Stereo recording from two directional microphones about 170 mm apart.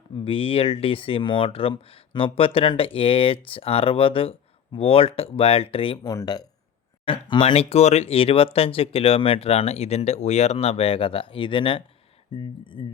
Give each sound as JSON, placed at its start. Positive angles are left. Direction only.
{"t": 0.3, "sound": "speech", "side_deg": 30}